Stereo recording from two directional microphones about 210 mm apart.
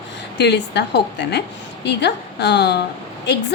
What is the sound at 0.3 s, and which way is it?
A woman's voice, 55° left (ahead or behind).